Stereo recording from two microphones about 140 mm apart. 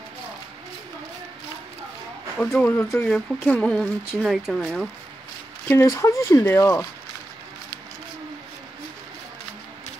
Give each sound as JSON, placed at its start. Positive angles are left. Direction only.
{"t": 2.3, "sound": "speech", "side_deg": 10}
{"t": 5.7, "sound": "speech", "side_deg": 20}